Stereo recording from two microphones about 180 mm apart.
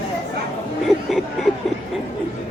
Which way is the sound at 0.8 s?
Centre (ahead or behind).